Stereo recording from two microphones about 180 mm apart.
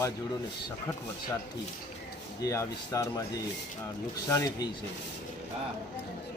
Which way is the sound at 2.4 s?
15° left (ahead or behind).